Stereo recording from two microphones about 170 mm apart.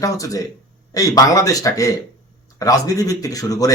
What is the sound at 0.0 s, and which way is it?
Speech, 20° left (ahead or behind).